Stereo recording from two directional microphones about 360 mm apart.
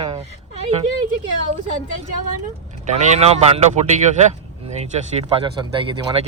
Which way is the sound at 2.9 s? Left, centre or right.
Centre.